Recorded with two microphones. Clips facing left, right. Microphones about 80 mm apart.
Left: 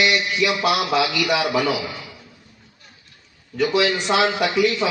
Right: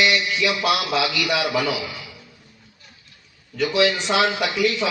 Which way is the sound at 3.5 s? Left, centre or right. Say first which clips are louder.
Left 1 dB; left.